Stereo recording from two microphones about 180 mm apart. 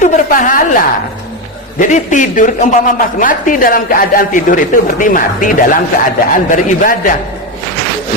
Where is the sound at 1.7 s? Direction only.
45° left (ahead or behind).